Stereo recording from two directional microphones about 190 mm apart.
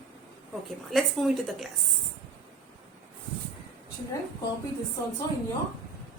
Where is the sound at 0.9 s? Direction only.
Centre (ahead or behind).